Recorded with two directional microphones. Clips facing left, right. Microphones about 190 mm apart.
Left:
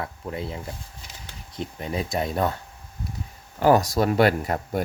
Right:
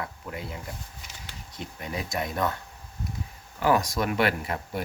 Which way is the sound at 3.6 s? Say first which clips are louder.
Left 5 dB; 40° left (ahead or behind).